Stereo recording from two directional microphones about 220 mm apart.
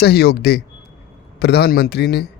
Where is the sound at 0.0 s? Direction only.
45° left (ahead or behind).